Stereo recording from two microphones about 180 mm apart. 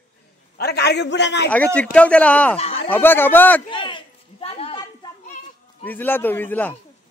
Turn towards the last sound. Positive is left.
turn(degrees=10)  # may be behind; listen again after turning